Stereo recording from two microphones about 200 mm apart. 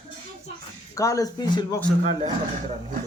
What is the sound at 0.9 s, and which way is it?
Speech, 15° left (ahead or behind).